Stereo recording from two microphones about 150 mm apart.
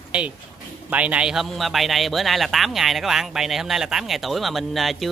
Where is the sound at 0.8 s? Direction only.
10° right (ahead or behind).